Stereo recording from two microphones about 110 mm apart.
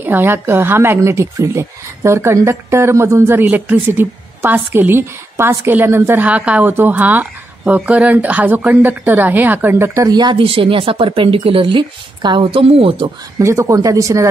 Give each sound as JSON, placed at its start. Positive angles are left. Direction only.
{"t": 0.0, "sound": "a woman's voice", "side_deg": -20}
{"t": 10.0, "sound": "speech", "side_deg": -40}
{"t": 10.4, "sound": "a woman's voice", "side_deg": -55}
{"t": 13.4, "sound": "a woman's voice", "side_deg": -25}